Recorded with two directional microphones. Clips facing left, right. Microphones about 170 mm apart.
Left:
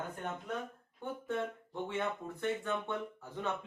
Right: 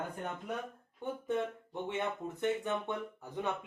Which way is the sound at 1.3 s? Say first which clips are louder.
Right 2 dB; 20° right (ahead or behind).